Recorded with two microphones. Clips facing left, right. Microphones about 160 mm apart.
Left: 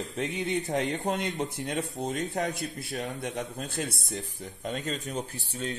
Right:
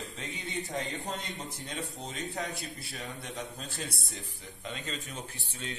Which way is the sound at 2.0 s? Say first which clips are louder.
Left 8 dB; 45° left (ahead or behind).